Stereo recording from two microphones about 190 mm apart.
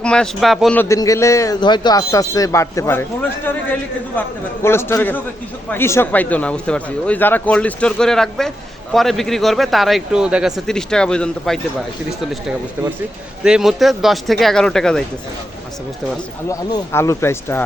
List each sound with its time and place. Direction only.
0.0 s speech: 5° left (ahead or behind)
0.8 s a man's voice: 15° left (ahead or behind)
13.4 s speech: 5° right (ahead or behind)
16.5 s a man's voice: 15° left (ahead or behind)